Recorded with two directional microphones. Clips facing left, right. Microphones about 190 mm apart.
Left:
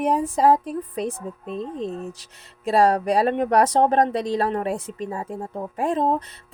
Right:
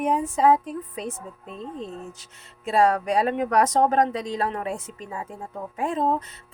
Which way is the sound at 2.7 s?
35° left (ahead or behind).